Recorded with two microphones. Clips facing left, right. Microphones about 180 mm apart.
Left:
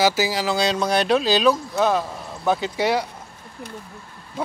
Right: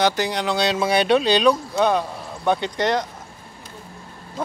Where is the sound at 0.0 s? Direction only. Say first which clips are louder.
Left 1 dB; 5° left (ahead or behind).